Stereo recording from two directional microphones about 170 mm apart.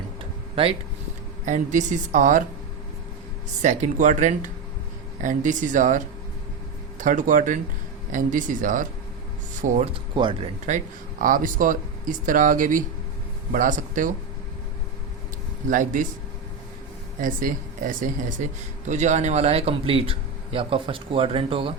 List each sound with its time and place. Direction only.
0.5 s speech: 35° right (ahead or behind)
1.5 s speech: 45° right (ahead or behind)
3.6 s speech: 45° right (ahead or behind)
7.0 s speech: 50° right (ahead or behind); by 10.5 s 30° right (ahead or behind)
10.7 s speech: 50° right (ahead or behind)
15.7 s speech: 50° right (ahead or behind)
17.2 s speech: 50° right (ahead or behind); by 21.7 s 30° right (ahead or behind)